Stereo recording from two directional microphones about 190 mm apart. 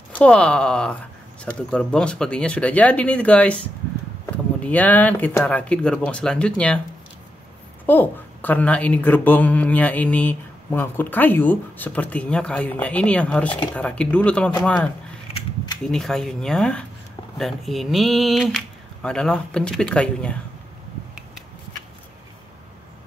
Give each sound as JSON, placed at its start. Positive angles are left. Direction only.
{"t": 0.2, "sound": "speech", "side_deg": 5}
{"t": 4.6, "sound": "a woman's voice", "side_deg": 10}
{"t": 7.8, "sound": "a woman's voice", "side_deg": 10}
{"t": 15.3, "sound": "a sound", "side_deg": 20}
{"t": 15.8, "sound": "speech", "side_deg": 0}